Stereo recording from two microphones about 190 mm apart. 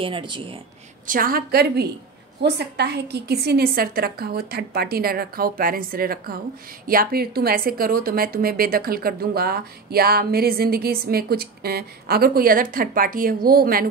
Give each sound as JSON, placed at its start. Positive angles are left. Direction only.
{"t": 0.0, "sound": "speech", "side_deg": -25}
{"t": 1.0, "sound": "a woman's voice", "side_deg": -50}